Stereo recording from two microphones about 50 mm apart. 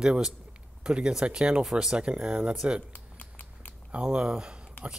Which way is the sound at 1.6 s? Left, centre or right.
Centre.